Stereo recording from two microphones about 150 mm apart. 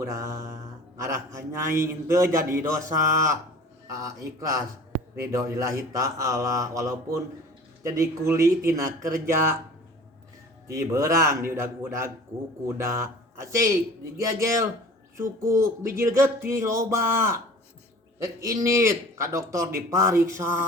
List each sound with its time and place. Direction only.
0.0 s a man's voice: 20° right (ahead or behind)
10.7 s a man's voice: 20° right (ahead or behind)